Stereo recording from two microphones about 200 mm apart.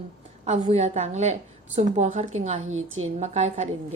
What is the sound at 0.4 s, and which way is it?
A woman's voice, 35° right (ahead or behind).